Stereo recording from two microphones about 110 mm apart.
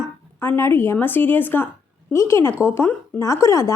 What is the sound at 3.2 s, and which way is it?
Speech, 30° left (ahead or behind).